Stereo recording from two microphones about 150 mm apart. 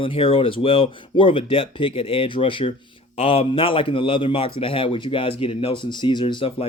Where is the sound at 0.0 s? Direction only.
35° left (ahead or behind).